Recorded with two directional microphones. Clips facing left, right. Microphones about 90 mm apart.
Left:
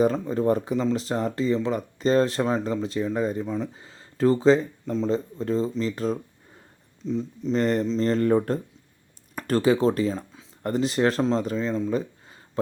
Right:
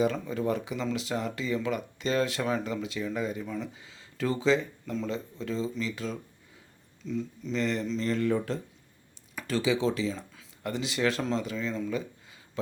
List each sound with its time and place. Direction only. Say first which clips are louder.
0.0 s speech: left 6 dB; 40° left (ahead or behind)
3.4 s speech: left 6 dB; 25° left (ahead or behind)
3.7 s speech: left 3 dB; 40° left (ahead or behind)
7.5 s speech: left 7 dB; 45° left (ahead or behind)
11.9 s a sound: left 6 dB; 40° left (ahead or behind)